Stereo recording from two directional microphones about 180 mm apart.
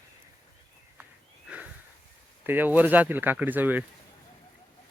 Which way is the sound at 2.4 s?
10° right (ahead or behind).